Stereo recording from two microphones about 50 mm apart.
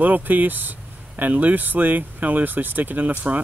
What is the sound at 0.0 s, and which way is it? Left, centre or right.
Speech, right.